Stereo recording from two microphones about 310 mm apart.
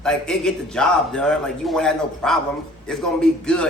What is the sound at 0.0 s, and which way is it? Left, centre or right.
A man's voice, centre.